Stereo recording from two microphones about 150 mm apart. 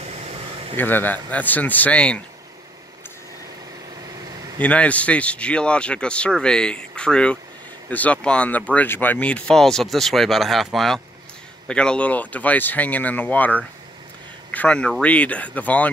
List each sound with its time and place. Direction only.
0.0 s a sound: 45° right (ahead or behind)
0.7 s speech: 15° left (ahead or behind)
4.6 s speech: 10° left (ahead or behind)